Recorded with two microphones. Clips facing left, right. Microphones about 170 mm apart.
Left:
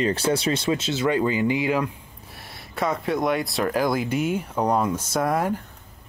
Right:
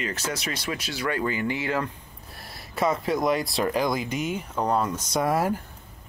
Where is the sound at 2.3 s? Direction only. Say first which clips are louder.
Even; centre (ahead or behind).